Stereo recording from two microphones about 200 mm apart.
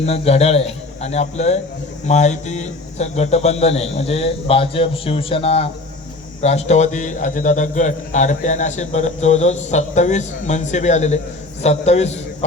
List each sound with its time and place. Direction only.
0.0 s a man's voice: 30° left (ahead or behind)